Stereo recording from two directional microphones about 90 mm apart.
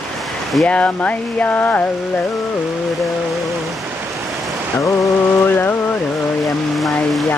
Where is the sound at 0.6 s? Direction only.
15° left (ahead or behind).